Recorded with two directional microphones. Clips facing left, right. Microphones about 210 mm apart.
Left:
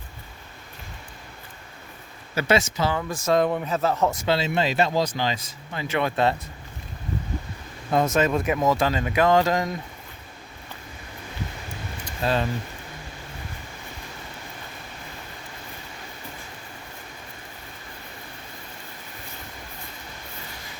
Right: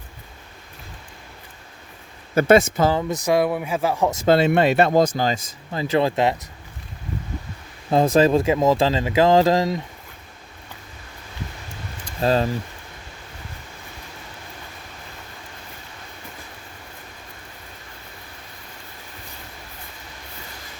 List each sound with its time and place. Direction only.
2.3 s speech: 50° right (ahead or behind)
2.9 s speech: 20° right (ahead or behind)
3.3 s speech: 10° right (ahead or behind)
4.3 s speech: 60° right (ahead or behind); by 6.1 s 35° right (ahead or behind)
7.9 s speech: 30° right (ahead or behind)
12.2 s speech: 40° right (ahead or behind)